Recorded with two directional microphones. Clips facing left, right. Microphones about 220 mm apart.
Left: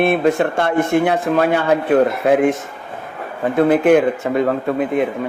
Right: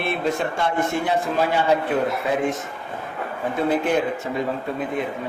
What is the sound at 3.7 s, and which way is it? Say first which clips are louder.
Speech: left 8 dB; 60° left (ahead or behind).